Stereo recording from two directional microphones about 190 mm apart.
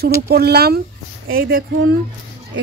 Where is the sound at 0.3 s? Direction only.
55° right (ahead or behind).